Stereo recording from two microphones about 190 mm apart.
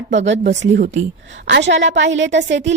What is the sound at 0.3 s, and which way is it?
A woman's voice, 70° right (ahead or behind).